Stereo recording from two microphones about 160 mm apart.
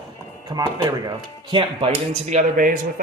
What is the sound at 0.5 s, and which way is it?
Speech, 25° right (ahead or behind).